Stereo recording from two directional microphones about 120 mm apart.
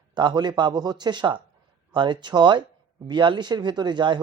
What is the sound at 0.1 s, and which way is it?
A man's voice, 40° right (ahead or behind).